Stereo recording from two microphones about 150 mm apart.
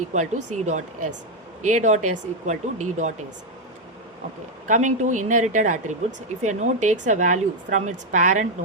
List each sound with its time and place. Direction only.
0.1 s speech: 50° right (ahead or behind)
4.7 s a woman's voice: 55° right (ahead or behind)